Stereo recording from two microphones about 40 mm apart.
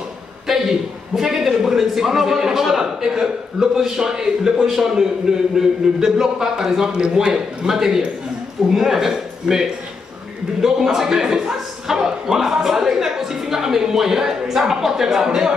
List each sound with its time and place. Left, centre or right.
0.5 s a man's voice: centre
7.0 s a man's voice: right
7.6 s a man's voice: centre